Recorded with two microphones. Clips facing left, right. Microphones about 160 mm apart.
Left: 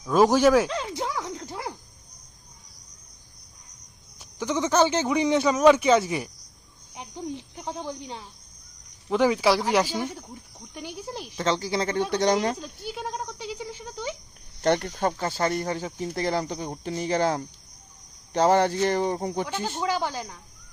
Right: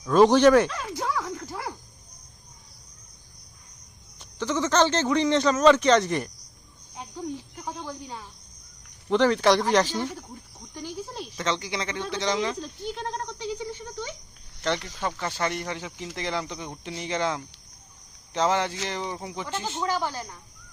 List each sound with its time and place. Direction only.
0.0 s speech: 5° left (ahead or behind)
0.7 s a sound: 20° left (ahead or behind)
4.2 s a man's voice: 10° left (ahead or behind)
6.9 s cricket: 20° left (ahead or behind)
9.0 s a man's voice: 10° left (ahead or behind)
11.3 s speech: 35° left (ahead or behind)
12.1 s speech: 55° left (ahead or behind)
12.5 s a sound: 5° left (ahead or behind)
14.6 s speech: 50° left (ahead or behind)
19.5 s a man's voice: 15° left (ahead or behind)